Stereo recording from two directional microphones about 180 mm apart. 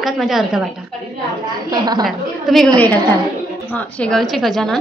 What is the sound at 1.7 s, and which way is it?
Speech, 20° right (ahead or behind).